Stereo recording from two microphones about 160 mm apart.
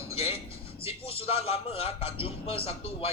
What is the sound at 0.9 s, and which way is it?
A man's voice, 35° left (ahead or behind).